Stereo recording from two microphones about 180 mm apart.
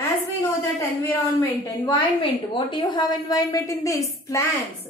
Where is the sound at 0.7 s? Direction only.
15° left (ahead or behind).